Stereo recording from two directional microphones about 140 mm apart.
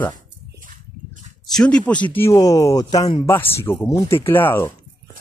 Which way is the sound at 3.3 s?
15° left (ahead or behind).